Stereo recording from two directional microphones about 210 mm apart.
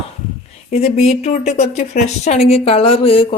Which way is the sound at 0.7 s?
30° left (ahead or behind).